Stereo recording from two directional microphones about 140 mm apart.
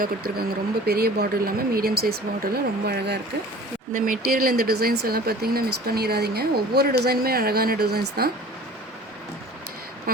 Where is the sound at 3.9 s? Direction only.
85° right.